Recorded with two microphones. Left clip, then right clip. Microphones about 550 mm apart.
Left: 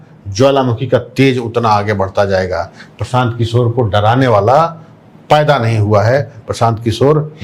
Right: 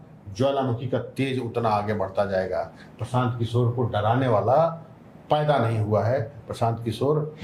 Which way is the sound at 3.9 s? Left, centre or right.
Left.